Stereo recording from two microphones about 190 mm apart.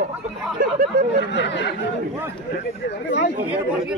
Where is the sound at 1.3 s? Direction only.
70° left (ahead or behind).